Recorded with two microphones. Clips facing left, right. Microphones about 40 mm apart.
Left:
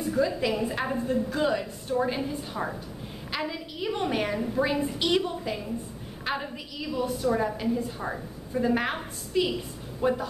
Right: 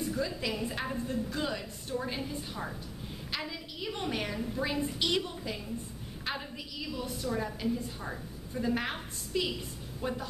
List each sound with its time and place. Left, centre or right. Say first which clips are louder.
0.1 s a woman's voice: left 8 dB; centre
2.6 s a woman's voice: left 7 dB; left